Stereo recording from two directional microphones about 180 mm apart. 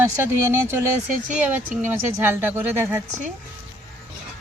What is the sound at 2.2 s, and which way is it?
Speech, 15° right (ahead or behind).